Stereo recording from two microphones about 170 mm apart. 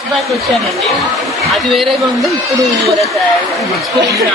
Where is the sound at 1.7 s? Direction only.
Centre (ahead or behind).